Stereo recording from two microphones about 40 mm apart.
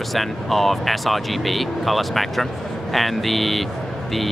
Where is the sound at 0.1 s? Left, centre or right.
Centre.